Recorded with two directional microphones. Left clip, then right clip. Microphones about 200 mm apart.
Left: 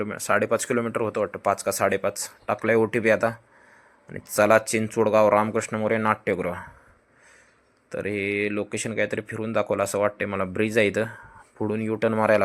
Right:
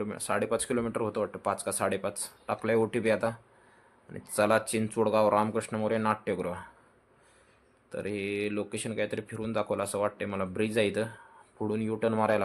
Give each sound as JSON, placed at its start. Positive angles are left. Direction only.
{"t": 0.0, "sound": "speech", "side_deg": 15}
{"t": 7.9, "sound": "speech", "side_deg": 20}